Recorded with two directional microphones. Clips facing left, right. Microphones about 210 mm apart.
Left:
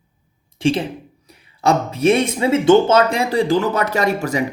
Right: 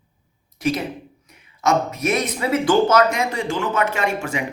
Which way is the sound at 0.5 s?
30° left (ahead or behind).